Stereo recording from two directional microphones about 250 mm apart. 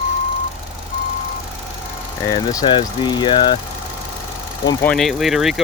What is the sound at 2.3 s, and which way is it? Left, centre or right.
Speech, centre.